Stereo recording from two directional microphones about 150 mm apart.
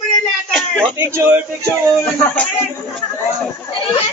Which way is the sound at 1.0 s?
15° right (ahead or behind).